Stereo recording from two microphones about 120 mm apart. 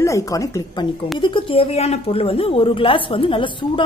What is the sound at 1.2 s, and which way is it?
A woman's voice, 45° left (ahead or behind).